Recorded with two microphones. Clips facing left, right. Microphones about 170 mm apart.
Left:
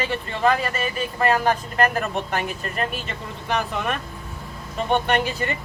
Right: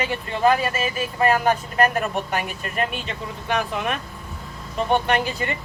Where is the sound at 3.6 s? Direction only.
Centre (ahead or behind).